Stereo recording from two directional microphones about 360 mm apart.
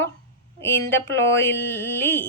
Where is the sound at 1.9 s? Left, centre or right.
Centre.